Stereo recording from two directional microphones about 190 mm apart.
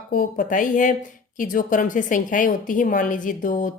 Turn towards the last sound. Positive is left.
turn(degrees=45)  # may be behind; listen again after turning